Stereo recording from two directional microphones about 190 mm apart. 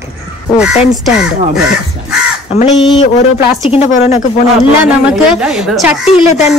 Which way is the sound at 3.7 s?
35° left (ahead or behind).